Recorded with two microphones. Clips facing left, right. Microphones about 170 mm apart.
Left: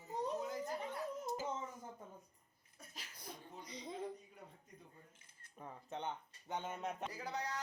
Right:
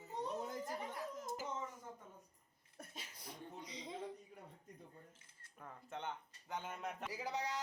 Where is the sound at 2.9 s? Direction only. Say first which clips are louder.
Right 2 dB; 25° right (ahead or behind).